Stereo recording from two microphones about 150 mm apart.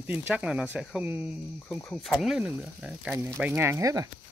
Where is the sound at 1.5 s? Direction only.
15° left (ahead or behind); by 4.0 s 20° right (ahead or behind).